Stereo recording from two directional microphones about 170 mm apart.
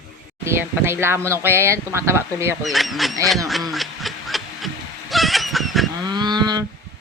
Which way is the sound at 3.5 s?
Centre (ahead or behind).